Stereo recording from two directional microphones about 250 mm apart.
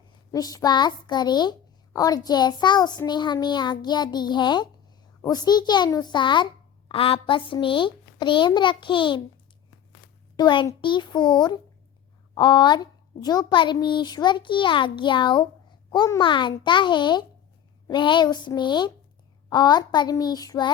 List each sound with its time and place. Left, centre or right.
0.3 s a child's voice: centre
10.3 s a child's voice: centre